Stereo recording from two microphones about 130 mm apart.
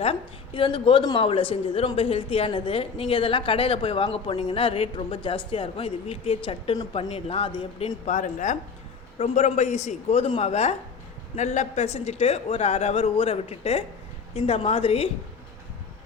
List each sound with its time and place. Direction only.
0.0 s a woman's voice: 45° left (ahead or behind)
8.0 s a woman's voice: 75° left (ahead or behind)
9.1 s a woman's voice: 55° left (ahead or behind)